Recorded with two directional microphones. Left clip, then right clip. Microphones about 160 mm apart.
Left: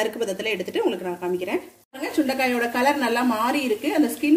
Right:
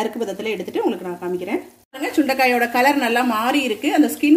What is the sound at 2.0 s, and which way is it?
Speech, 35° right (ahead or behind).